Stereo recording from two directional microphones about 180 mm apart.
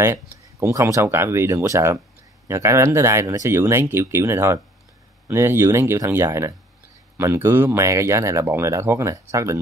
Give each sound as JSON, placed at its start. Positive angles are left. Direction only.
{"t": 0.0, "sound": "speech", "side_deg": -15}